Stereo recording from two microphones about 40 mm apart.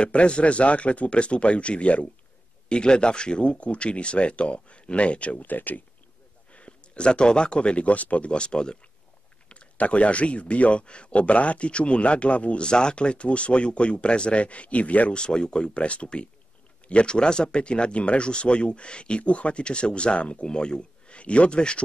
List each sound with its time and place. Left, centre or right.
0.0 s speech: left
2.7 s speech: left
5.4 s speech: left
6.5 s speech: left
8.3 s speech: left
15.1 s speech: left